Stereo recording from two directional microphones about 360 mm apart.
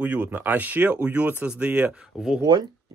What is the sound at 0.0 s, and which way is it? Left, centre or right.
Speech, centre.